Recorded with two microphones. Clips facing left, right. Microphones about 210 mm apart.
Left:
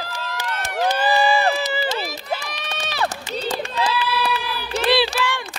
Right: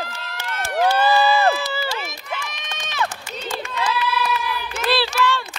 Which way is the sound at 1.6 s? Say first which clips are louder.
Left 3 dB; 20° left (ahead or behind).